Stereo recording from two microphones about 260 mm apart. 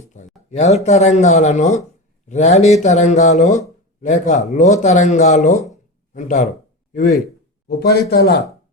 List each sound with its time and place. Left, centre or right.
0.0 s speech: left
6.5 s a sound: left
7.7 s a man's voice: left